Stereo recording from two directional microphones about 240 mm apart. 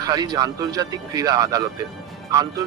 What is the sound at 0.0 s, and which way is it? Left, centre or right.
Speech, centre.